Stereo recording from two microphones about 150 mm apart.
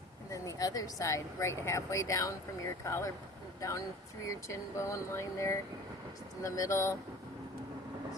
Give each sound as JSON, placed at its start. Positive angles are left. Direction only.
{"t": 0.3, "sound": "speech", "side_deg": 25}